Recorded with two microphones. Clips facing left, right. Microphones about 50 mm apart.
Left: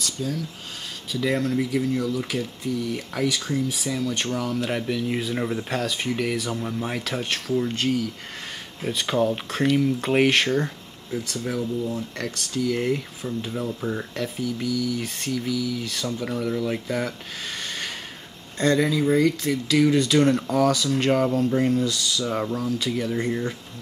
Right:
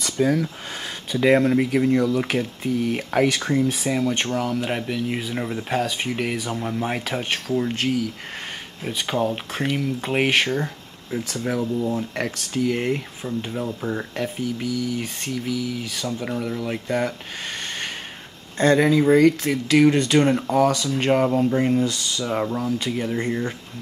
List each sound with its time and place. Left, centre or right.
0.2 s speech: right
3.9 s speech: right
4.4 s speech: centre
8.8 s speech: centre
11.3 s speech: right
12.7 s speech: centre
15.8 s speech: centre
18.6 s speech: right
20.2 s speech: centre